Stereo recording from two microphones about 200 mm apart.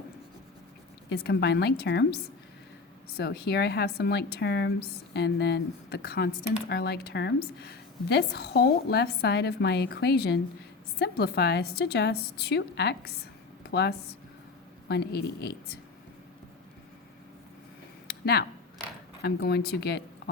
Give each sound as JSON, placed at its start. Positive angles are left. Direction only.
{"t": 1.1, "sound": "a woman's voice", "side_deg": 55}
{"t": 18.1, "sound": "a sound", "side_deg": 50}
{"t": 19.2, "sound": "speech", "side_deg": 55}